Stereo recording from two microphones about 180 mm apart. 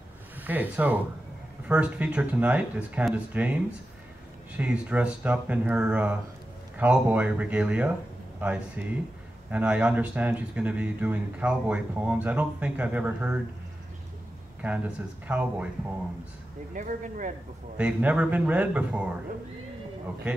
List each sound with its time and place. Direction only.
0.4 s speech: 10° right (ahead or behind)
4.6 s speech: 10° right (ahead or behind)
14.6 s speech: 10° right (ahead or behind)
16.7 s speech: 45° right (ahead or behind)
17.7 s speech: 10° right (ahead or behind)